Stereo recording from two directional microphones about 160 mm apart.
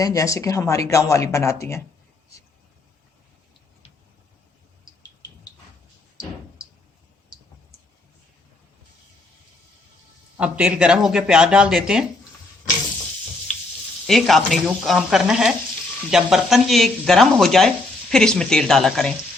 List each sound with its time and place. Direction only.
0.0 s speech: 20° left (ahead or behind)
10.3 s speech: 10° right (ahead or behind)
14.1 s speech: centre (ahead or behind)